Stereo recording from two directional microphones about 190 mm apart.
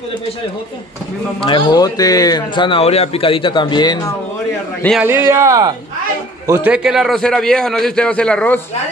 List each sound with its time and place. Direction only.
1.4 s speech: 25° left (ahead or behind)
5.0 s a man's voice: 10° right (ahead or behind); by 8.5 s 5° left (ahead or behind)